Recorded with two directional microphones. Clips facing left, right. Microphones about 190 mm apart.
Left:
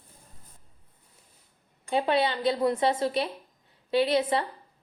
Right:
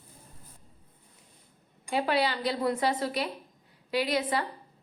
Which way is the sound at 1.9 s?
25° left (ahead or behind).